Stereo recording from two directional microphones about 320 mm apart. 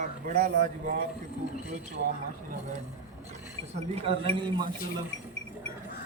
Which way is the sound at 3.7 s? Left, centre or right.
Centre.